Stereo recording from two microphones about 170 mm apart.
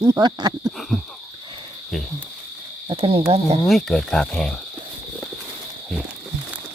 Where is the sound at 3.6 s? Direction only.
Centre (ahead or behind).